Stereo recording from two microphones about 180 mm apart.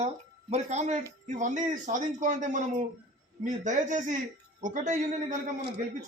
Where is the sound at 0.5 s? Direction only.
40° right (ahead or behind).